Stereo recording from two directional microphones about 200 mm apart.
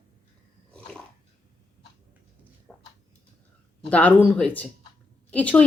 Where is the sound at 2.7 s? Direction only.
5° left (ahead or behind).